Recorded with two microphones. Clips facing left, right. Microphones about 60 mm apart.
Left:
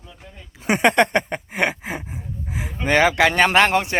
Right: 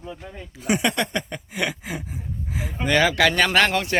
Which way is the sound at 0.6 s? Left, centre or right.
Left.